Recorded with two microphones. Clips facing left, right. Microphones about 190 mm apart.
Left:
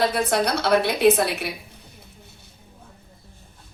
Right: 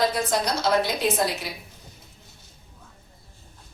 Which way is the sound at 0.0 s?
60° left (ahead or behind).